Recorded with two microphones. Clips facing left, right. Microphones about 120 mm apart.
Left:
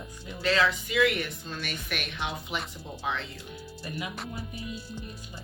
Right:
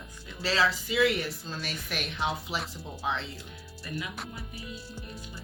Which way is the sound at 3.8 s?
25° left (ahead or behind).